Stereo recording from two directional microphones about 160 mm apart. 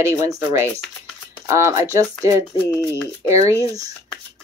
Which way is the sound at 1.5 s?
20° right (ahead or behind).